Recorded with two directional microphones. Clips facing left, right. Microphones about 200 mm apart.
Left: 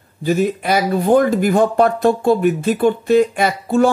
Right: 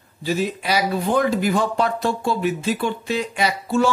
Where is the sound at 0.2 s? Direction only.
50° left (ahead or behind).